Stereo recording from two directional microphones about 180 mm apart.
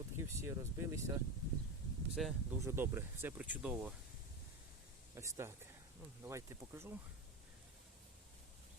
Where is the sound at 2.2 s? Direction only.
Centre (ahead or behind).